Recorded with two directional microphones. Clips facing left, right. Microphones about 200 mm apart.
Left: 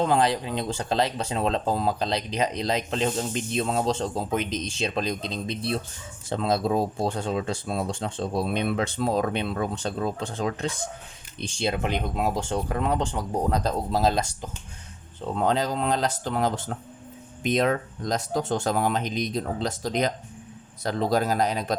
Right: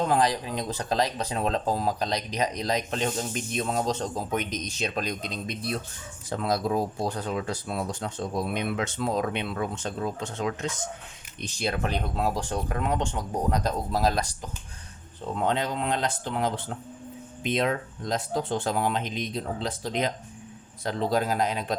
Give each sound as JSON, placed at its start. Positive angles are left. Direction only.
{"t": 0.0, "sound": "speech", "side_deg": 25}
{"t": 15.4, "sound": "speech", "side_deg": 35}